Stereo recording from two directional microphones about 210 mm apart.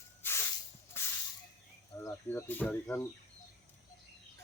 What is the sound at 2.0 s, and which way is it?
Speech, 10° left (ahead or behind).